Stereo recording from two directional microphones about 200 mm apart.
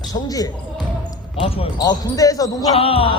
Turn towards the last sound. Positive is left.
turn(degrees=25)  # may be behind; listen again after turning